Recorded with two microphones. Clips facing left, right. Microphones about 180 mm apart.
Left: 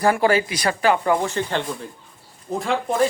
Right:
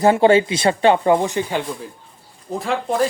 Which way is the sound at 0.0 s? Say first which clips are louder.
Right 5 dB; 25° right (ahead or behind).